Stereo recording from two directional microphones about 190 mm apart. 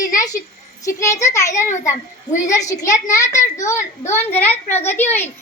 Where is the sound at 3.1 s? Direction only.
15° left (ahead or behind).